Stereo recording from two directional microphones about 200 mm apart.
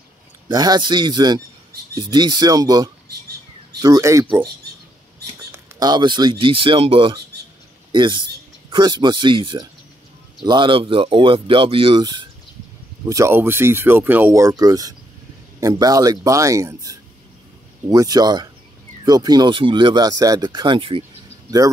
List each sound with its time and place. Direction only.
0.5 s speech: 20° right (ahead or behind)
5.5 s speech: 20° right (ahead or behind)